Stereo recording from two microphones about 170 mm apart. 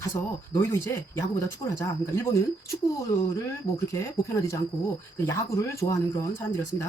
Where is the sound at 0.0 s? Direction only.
20° left (ahead or behind).